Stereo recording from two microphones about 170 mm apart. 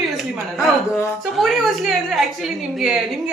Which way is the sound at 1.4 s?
Centre (ahead or behind).